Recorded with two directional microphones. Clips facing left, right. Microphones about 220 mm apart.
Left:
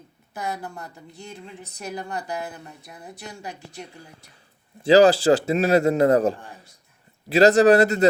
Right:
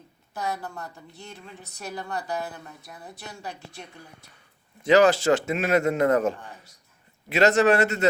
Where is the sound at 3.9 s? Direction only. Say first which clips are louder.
Left 2 dB; 30° left (ahead or behind).